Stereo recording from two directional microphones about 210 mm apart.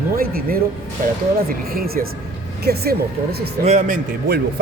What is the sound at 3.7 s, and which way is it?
Speech, 35° right (ahead or behind).